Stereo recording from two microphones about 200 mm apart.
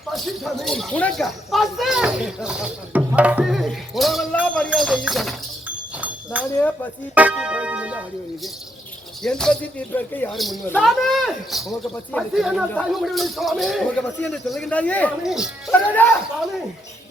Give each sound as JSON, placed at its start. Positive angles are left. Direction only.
{"t": 0.1, "sound": "speech", "side_deg": 0}
{"t": 9.2, "sound": "speech", "side_deg": 5}